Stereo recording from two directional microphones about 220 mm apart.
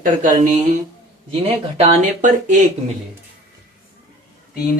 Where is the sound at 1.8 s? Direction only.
30° right (ahead or behind).